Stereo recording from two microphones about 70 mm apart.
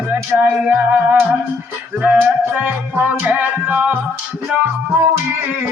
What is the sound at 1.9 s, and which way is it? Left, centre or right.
Music, centre.